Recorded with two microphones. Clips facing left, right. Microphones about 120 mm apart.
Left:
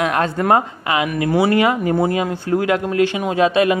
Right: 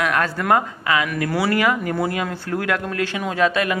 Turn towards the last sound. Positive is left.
turn(degrees=20)  # may be behind; listen again after turning